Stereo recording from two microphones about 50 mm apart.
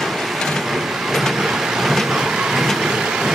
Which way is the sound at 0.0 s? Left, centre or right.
Centre.